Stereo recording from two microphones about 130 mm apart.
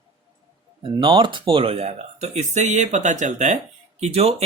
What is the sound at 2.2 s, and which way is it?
Speech, 65° right (ahead or behind).